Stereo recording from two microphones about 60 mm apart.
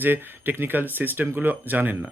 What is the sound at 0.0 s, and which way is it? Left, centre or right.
Speech, right.